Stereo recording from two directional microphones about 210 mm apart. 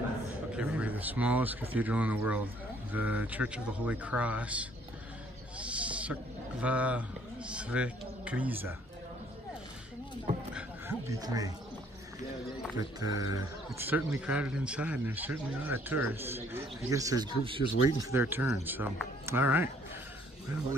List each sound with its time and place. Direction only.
0.6 s speech: 5° right (ahead or behind)
5.6 s owl: 5° right (ahead or behind)
6.6 s speech: 5° right (ahead or behind)
10.5 s roaring cats: 15° right (ahead or behind)
12.7 s speech: 15° right (ahead or behind)
17.8 s speech: 10° right (ahead or behind)